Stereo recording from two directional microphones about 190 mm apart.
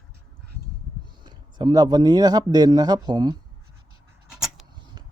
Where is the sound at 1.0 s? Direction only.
25° right (ahead or behind).